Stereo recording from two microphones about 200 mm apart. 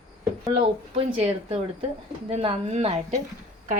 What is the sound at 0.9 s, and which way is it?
A woman's voice, 30° right (ahead or behind).